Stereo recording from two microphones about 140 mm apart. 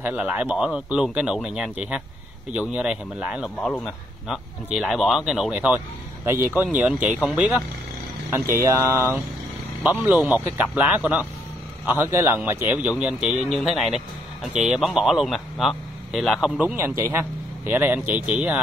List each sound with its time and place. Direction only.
0.0 s speech: 10° right (ahead or behind)
8.3 s speech: 15° right (ahead or behind)
16.7 s speech: 15° right (ahead or behind)